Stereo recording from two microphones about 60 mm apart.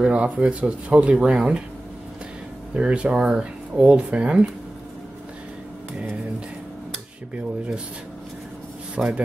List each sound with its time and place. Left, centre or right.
0.0 s speech: centre
2.7 s speech: centre
7.3 s speech: right
9.0 s speech: centre